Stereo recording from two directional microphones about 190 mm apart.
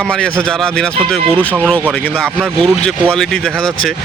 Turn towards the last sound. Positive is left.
turn(degrees=5)  # may be behind; listen again after turning